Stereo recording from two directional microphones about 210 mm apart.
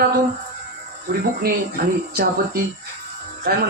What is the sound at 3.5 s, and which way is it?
Speech, 45° right (ahead or behind).